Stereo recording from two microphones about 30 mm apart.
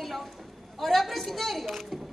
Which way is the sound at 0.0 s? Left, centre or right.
Centre.